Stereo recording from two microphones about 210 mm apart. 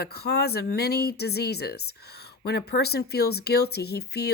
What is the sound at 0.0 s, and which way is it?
Speech, 50° left (ahead or behind).